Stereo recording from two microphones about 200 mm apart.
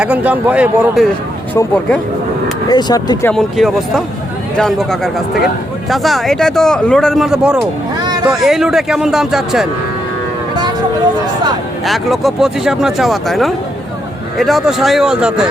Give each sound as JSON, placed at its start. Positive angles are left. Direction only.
{"t": 0.0, "sound": "speech", "side_deg": -5}
{"t": 1.5, "sound": "speech", "side_deg": 5}
{"t": 2.6, "sound": "speech", "side_deg": 20}
{"t": 3.3, "sound": "speech", "side_deg": 0}
{"t": 11.9, "sound": "speech", "side_deg": 0}